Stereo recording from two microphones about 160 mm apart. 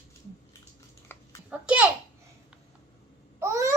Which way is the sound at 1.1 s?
10° left (ahead or behind).